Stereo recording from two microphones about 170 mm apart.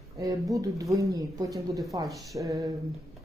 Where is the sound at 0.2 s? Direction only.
20° right (ahead or behind).